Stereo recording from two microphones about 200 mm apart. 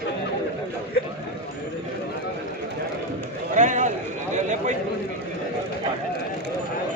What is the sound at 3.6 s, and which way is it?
Speech, 40° right (ahead or behind).